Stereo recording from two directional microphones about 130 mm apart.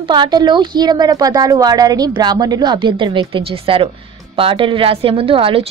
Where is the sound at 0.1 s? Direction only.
35° right (ahead or behind).